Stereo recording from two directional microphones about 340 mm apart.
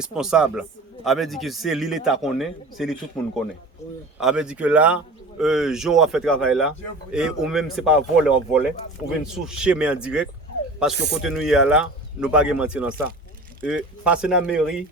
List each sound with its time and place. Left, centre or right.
0.1 s a man's voice: centre
4.2 s a man's voice: centre
10.9 s speech: right
11.3 s a man's voice: centre